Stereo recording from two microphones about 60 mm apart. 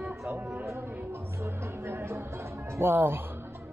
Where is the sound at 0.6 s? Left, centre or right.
Right.